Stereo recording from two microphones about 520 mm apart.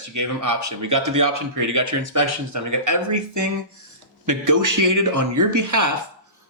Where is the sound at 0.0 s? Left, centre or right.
Right.